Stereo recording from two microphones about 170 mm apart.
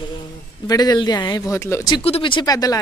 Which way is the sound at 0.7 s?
25° left (ahead or behind).